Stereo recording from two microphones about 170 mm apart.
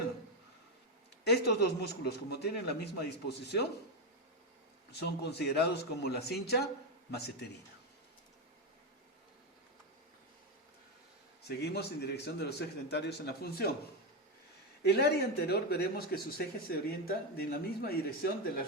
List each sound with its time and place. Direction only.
1.2 s speech: 70° left (ahead or behind)
4.9 s speech: 70° left (ahead or behind)
11.4 s speech: 75° left (ahead or behind)
14.8 s speech: 70° left (ahead or behind)